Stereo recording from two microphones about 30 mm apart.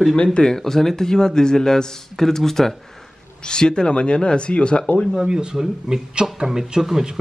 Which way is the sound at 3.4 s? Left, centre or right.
Left.